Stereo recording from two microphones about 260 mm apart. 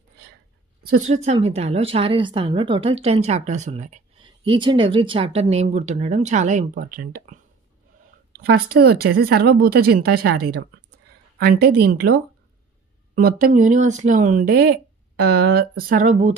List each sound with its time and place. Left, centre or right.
0.8 s a woman's voice: right
11.6 s speech: right